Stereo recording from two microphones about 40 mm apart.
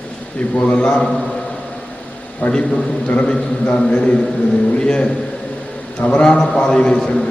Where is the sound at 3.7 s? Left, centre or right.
Left.